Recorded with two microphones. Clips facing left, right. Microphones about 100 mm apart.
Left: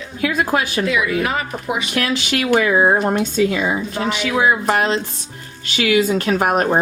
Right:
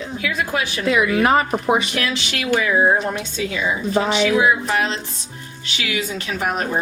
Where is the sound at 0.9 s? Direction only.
40° right (ahead or behind).